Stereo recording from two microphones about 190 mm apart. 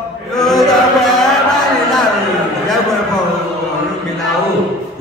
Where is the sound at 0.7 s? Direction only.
Centre (ahead or behind).